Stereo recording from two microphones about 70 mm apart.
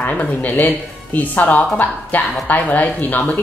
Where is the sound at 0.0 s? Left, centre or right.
Centre.